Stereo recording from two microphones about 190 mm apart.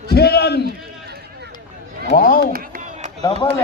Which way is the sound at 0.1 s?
55° left (ahead or behind).